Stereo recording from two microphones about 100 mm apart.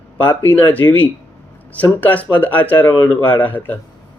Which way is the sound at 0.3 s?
20° left (ahead or behind).